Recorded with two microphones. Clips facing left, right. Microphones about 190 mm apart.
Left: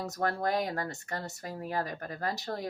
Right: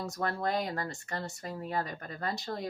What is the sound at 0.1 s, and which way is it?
Speech, 40° left (ahead or behind).